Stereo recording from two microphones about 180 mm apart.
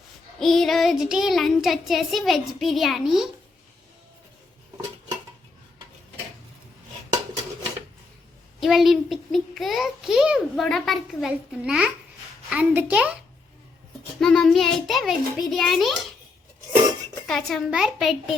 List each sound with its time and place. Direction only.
0.3 s a child's voice: centre (ahead or behind)
8.6 s a child's voice: centre (ahead or behind)
14.2 s a child's voice: 5° left (ahead or behind)
17.2 s a child's voice: centre (ahead or behind)